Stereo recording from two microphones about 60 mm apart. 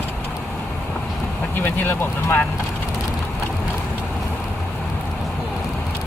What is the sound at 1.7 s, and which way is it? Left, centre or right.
Speech, left.